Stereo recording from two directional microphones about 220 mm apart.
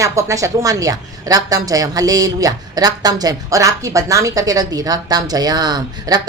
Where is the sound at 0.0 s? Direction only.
15° right (ahead or behind).